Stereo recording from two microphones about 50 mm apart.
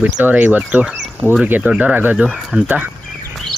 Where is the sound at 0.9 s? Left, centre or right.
Right.